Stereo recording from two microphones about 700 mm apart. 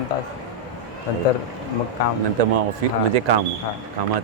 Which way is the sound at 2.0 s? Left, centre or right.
Left.